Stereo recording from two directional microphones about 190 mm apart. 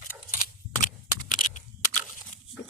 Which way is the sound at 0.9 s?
45° left (ahead or behind).